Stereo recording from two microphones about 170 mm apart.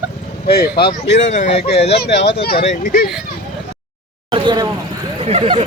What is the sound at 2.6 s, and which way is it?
Speech, 45° left (ahead or behind).